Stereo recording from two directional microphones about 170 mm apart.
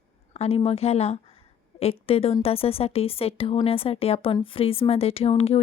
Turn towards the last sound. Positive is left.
turn(degrees=35)  # may be behind; listen again after turning